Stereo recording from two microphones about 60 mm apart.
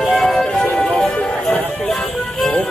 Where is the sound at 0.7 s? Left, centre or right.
Centre.